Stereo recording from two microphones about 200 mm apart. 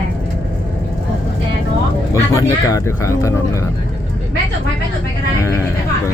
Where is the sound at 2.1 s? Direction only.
15° left (ahead or behind).